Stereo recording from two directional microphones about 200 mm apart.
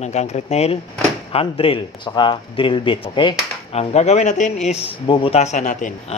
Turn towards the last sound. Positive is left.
turn(degrees=35)  # may be behind; listen again after turning